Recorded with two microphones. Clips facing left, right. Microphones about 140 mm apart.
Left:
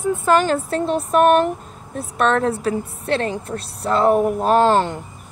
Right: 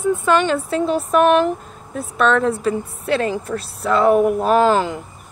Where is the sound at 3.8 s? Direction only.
35° left (ahead or behind).